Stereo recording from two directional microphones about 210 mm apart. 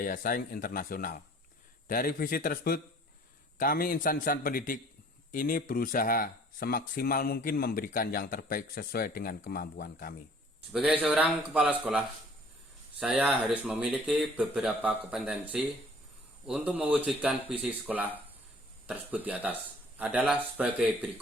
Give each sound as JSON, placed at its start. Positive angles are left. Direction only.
{"t": 0.0, "sound": "speech", "side_deg": 40}
{"t": 10.7, "sound": "speech", "side_deg": -5}